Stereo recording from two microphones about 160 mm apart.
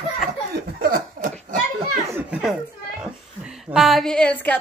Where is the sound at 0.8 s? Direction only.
65° right (ahead or behind).